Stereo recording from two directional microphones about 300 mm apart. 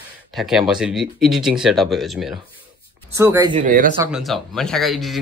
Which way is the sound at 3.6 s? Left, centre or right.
Right.